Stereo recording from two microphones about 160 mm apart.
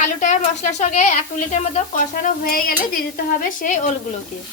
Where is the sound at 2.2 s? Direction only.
65° left (ahead or behind).